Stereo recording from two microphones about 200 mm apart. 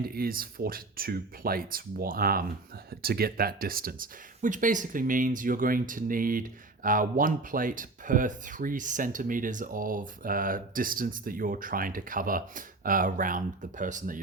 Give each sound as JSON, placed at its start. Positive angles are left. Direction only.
{"t": 0.1, "sound": "speech", "side_deg": -45}